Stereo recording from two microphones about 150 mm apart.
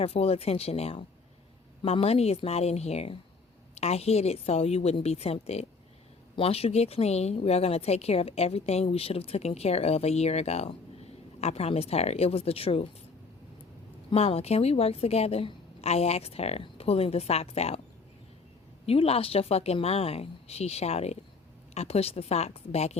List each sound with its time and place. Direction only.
0.0 s a woman's voice: 40° left (ahead or behind)
14.1 s a woman's voice: 40° left (ahead or behind)
18.9 s a woman's voice: 40° left (ahead or behind)